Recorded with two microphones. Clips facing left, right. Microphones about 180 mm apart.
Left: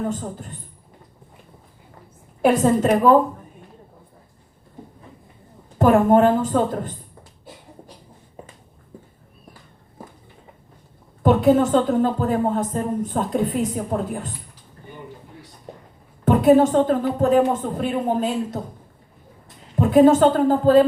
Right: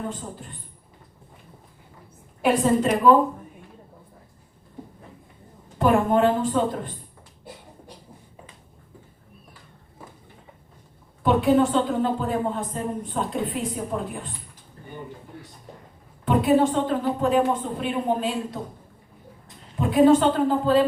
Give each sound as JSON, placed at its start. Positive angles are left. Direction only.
{"t": 0.1, "sound": "a woman's voice", "side_deg": 45}
{"t": 2.4, "sound": "a woman's voice", "side_deg": 45}
{"t": 5.8, "sound": "a woman's voice", "side_deg": 45}
{"t": 11.2, "sound": "a woman's voice", "side_deg": 45}
{"t": 16.2, "sound": "a woman's voice", "side_deg": 45}
{"t": 19.8, "sound": "a woman's voice", "side_deg": 45}